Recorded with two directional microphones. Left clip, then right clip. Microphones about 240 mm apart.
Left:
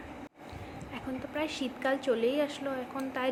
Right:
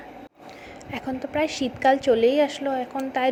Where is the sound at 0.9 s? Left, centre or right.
Right.